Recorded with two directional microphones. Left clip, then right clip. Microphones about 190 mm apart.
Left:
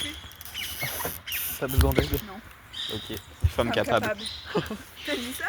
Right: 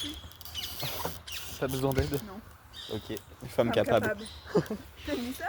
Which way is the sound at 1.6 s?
25° left (ahead or behind).